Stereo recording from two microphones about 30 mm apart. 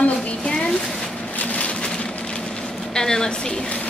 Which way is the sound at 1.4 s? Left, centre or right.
Left.